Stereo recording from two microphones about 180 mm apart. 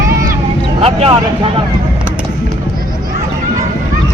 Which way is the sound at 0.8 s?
35° right (ahead or behind).